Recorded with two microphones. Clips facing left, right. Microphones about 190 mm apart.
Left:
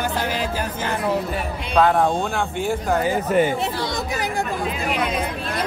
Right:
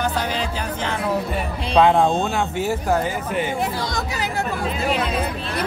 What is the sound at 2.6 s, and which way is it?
Speech, 5° right (ahead or behind).